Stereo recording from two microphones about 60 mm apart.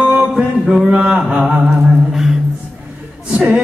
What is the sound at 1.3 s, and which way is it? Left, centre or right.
Humming, centre.